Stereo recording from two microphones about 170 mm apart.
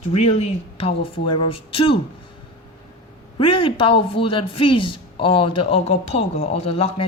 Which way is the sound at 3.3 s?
30° left (ahead or behind).